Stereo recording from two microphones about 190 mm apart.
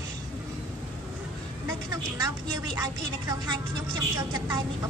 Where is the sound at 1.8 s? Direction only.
20° right (ahead or behind).